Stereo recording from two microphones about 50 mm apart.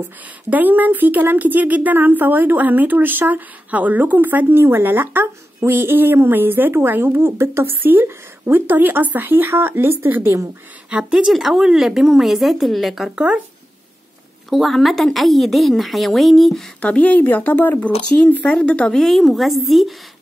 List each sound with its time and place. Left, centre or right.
0.5 s a woman's voice: right
5.2 s a woman's voice: right
10.9 s a woman's voice: centre
14.5 s speech: centre
16.8 s speech: left
18.9 s speech: centre